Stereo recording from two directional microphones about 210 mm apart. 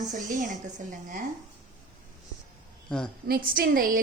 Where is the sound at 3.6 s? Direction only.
40° right (ahead or behind).